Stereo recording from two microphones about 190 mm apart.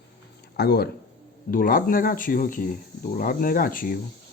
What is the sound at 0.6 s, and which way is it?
Speech, 55° left (ahead or behind).